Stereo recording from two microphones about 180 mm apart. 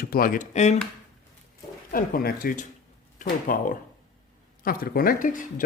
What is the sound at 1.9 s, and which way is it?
Speech, 55° left (ahead or behind).